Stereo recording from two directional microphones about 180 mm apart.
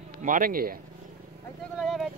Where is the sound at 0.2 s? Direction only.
50° right (ahead or behind).